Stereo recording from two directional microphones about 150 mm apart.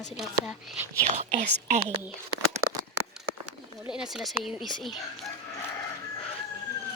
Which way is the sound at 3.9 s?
5° right (ahead or behind).